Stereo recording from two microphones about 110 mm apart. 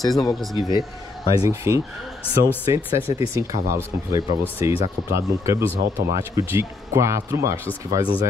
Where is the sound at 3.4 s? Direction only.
30° right (ahead or behind).